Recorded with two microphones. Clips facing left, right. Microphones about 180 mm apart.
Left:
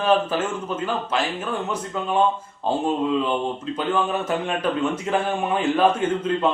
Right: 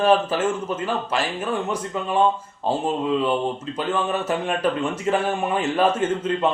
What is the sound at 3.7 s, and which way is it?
Speech, 5° right (ahead or behind).